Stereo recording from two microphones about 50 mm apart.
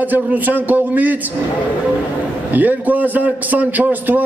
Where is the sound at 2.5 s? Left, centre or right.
Right.